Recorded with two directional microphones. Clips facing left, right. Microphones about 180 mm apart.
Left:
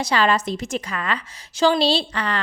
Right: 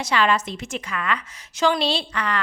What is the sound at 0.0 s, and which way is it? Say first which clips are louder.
A woman's voice: left 1 dB; 35° left (ahead or behind).